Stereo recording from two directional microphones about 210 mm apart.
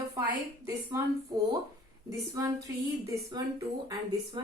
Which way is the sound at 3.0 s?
15° right (ahead or behind).